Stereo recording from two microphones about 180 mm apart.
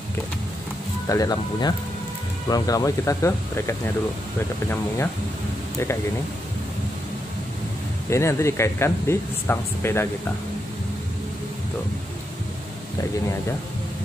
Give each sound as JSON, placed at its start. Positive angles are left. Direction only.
{"t": 1.0, "sound": "speech", "side_deg": 20}
{"t": 8.1, "sound": "speech", "side_deg": 15}